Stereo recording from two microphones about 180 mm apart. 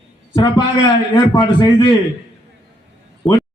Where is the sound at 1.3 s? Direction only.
25° left (ahead or behind).